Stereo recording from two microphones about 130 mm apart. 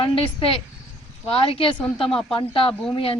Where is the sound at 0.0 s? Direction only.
40° left (ahead or behind).